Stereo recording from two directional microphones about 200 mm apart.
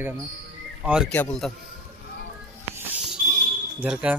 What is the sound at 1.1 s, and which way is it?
Speech, 5° left (ahead or behind).